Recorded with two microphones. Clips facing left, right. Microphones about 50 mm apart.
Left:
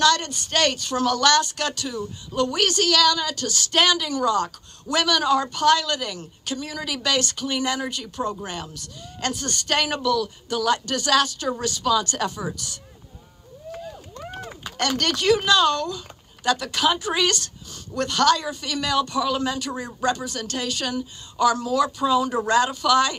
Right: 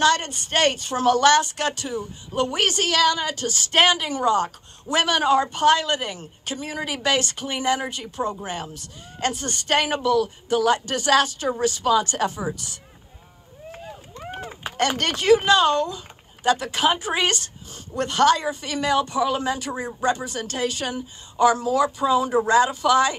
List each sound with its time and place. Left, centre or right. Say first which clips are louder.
0.0 s speech: even; right
13.7 s a sound: left 3 dB; right
16.4 s speech: right 1 dB; right